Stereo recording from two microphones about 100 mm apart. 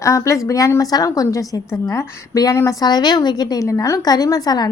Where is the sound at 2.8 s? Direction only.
45° left (ahead or behind).